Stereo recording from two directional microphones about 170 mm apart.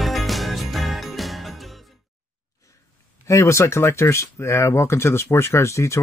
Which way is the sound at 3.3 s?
15° left (ahead or behind).